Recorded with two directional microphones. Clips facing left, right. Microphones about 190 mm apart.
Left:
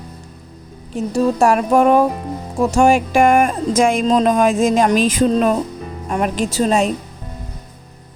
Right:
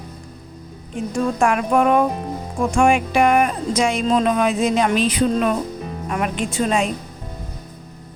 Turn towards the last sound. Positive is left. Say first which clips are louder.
# left 4 dB
turn(degrees=40)  # may be behind; listen again after turning